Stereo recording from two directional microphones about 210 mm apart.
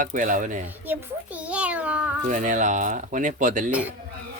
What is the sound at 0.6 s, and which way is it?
A child's voice, 10° right (ahead or behind).